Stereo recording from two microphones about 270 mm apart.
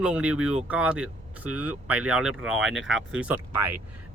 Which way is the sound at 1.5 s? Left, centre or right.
Right.